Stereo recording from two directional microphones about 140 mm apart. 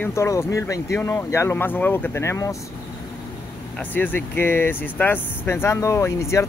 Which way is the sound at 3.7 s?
10° left (ahead or behind).